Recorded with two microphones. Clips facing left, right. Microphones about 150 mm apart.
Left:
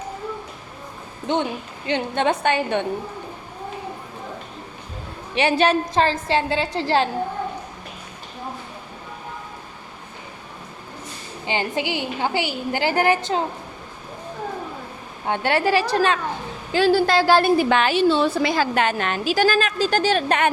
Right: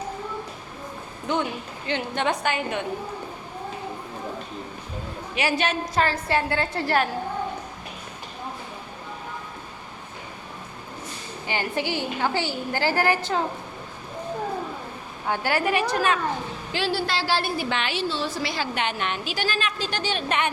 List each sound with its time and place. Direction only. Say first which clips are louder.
1.3 s a woman's voice: left 3 dB; 20° left (ahead or behind)
5.3 s a woman's voice: left 7 dB; 25° left (ahead or behind)
11.4 s a woman's voice: left 3 dB; 20° left (ahead or behind)
15.3 s a woman's voice: left 4 dB; 25° left (ahead or behind)
16.7 s a woman's voice: left 9 dB; 45° left (ahead or behind)